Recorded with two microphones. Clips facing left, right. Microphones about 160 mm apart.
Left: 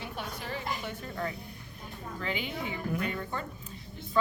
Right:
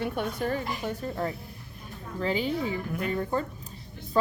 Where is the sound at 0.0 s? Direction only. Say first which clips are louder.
Right 10 dB; 55° right (ahead or behind); by 2.7 s 35° right (ahead or behind).